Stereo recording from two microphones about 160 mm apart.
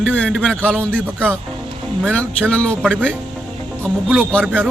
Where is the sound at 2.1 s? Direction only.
10° left (ahead or behind).